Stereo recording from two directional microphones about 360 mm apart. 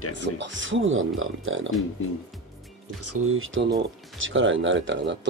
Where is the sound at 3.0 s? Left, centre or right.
Right.